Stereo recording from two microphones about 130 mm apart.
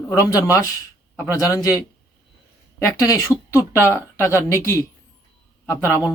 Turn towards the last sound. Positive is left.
turn(degrees=25)  # may be behind; listen again after turning